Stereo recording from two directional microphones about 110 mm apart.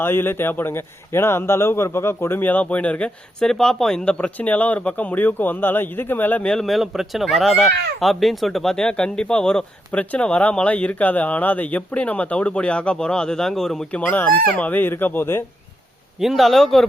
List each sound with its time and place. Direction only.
0.0 s speech: 20° left (ahead or behind); by 14.0 s 5° left (ahead or behind)
14.0 s speech: 15° left (ahead or behind)
16.2 s a man's voice: centre (ahead or behind)